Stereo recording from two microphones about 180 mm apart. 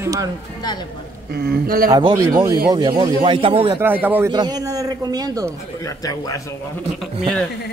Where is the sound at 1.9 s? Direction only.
25° right (ahead or behind).